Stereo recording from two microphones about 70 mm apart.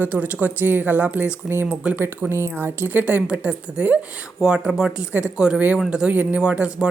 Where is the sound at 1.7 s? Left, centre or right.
Centre.